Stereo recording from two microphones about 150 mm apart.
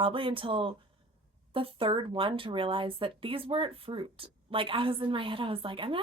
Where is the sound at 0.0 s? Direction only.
35° right (ahead or behind).